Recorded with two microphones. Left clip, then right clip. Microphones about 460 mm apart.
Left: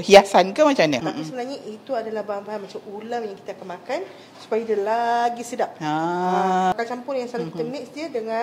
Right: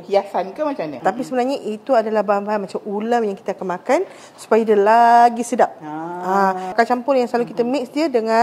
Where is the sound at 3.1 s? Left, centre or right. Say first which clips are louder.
Right 9 dB; right.